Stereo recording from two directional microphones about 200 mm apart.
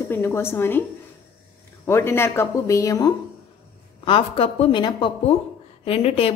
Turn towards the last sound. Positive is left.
turn(degrees=30)  # may be behind; listen again after turning